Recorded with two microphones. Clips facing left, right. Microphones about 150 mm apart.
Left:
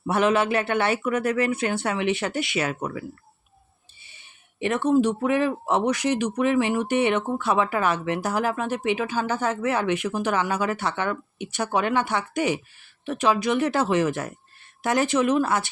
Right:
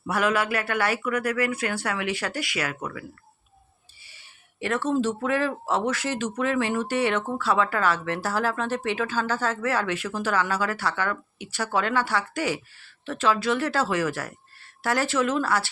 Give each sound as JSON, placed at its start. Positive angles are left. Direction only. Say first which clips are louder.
{"t": 0.1, "sound": "speech", "louder": "left 3 dB", "side_deg": 25}
{"t": 4.0, "sound": "speech", "louder": "left 1 dB", "side_deg": 20}